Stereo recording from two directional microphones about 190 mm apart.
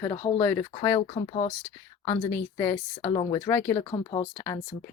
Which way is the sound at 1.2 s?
30° left (ahead or behind).